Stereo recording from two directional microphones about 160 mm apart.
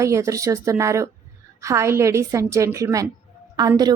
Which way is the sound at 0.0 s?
20° right (ahead or behind).